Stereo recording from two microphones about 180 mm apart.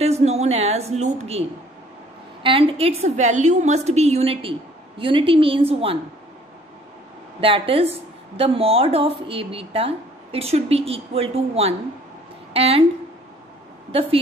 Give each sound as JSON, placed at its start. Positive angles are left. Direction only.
{"t": 0.0, "sound": "a woman's voice", "side_deg": -35}
{"t": 2.4, "sound": "a woman's voice", "side_deg": -30}
{"t": 7.3, "sound": "a woman's voice", "side_deg": -30}